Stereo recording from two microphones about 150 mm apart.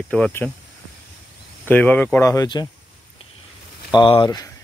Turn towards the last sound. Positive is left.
turn(degrees=25)  # may be behind; listen again after turning